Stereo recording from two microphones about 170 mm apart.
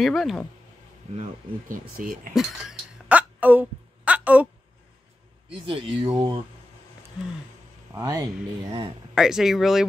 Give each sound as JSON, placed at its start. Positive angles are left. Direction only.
{"t": 0.0, "sound": "speech", "side_deg": 0}
{"t": 1.1, "sound": "speech", "side_deg": -40}
{"t": 2.0, "sound": "speech", "side_deg": -55}
{"t": 2.3, "sound": "a sound", "side_deg": -5}
{"t": 5.5, "sound": "speech", "side_deg": -35}
{"t": 7.9, "sound": "speech", "side_deg": -20}
{"t": 9.1, "sound": "speech", "side_deg": -5}